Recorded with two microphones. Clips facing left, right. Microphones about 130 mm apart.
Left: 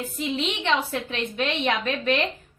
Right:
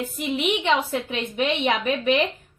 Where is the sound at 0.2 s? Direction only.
15° right (ahead or behind).